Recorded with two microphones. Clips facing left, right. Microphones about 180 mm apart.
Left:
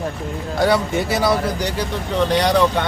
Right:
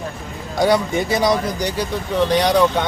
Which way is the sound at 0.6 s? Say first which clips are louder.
Right 1 dB; 15° right (ahead or behind).